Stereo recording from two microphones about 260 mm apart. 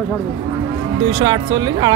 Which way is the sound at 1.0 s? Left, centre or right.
Centre.